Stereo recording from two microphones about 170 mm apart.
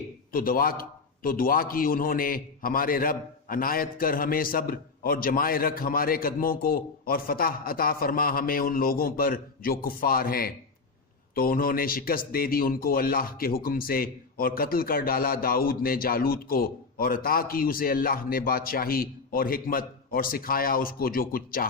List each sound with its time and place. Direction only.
0.3 s a man's voice: 60° left (ahead or behind)